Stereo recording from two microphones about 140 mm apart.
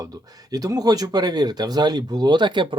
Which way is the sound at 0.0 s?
25° right (ahead or behind).